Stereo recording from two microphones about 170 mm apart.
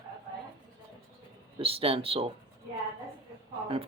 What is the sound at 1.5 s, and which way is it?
Speech, 35° right (ahead or behind).